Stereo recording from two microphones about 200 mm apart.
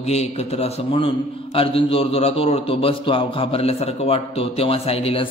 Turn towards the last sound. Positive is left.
turn(degrees=30)  # may be behind; listen again after turning